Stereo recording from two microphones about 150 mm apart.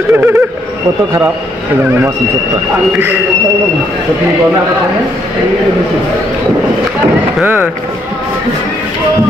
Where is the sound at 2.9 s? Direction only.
15° right (ahead or behind).